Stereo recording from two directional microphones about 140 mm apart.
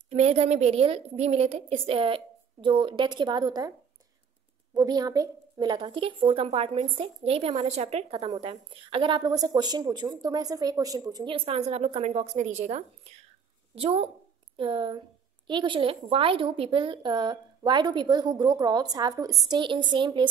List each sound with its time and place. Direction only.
0.1 s a woman's voice: 45° right (ahead or behind); by 3.7 s 30° right (ahead or behind)
4.7 s a woman's voice: 30° right (ahead or behind)
11.3 s a woman's voice: 45° right (ahead or behind)